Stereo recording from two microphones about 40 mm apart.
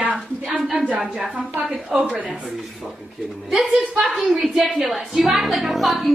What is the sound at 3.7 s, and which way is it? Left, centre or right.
A woman's voice, centre.